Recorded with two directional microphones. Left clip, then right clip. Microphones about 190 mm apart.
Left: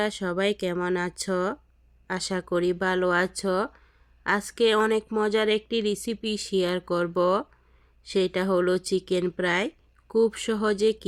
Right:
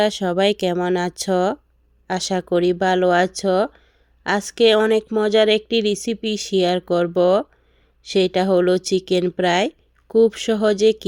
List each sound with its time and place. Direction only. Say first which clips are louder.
0.0 s speech: right 8 dB; 15° right (ahead or behind)